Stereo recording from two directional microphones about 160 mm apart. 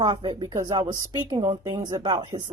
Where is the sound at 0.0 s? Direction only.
30° right (ahead or behind).